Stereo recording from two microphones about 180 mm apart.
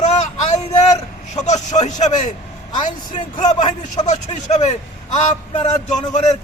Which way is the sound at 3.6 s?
30° left (ahead or behind).